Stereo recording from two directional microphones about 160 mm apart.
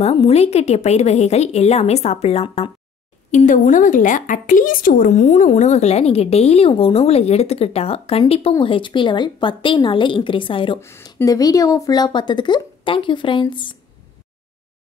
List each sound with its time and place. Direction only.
0.3 s a woman's voice: 40° left (ahead or behind)
10.8 s speech: 15° left (ahead or behind)